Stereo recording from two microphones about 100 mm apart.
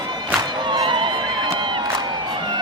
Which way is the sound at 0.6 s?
50° right (ahead or behind).